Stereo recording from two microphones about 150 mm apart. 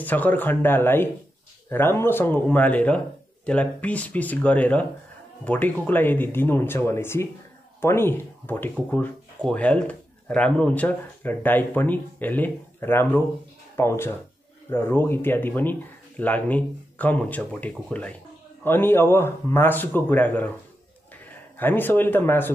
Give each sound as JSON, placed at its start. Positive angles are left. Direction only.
{"t": 0.0, "sound": "speech", "side_deg": 10}